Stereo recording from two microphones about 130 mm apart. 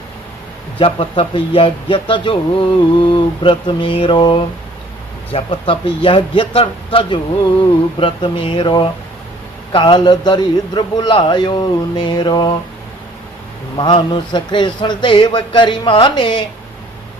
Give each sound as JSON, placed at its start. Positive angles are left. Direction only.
{"t": 0.8, "sound": "a man's voice", "side_deg": 45}
{"t": 13.7, "sound": "a man's voice", "side_deg": 35}